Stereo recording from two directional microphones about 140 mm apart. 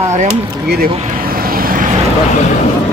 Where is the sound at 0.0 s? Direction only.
55° right (ahead or behind).